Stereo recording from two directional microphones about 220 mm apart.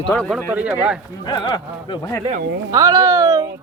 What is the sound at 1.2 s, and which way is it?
Speech, 20° left (ahead or behind).